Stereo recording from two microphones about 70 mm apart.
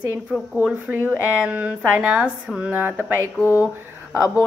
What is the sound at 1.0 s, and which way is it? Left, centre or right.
A woman's voice, right.